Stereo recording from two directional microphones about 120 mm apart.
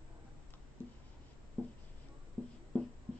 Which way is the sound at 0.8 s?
15° left (ahead or behind).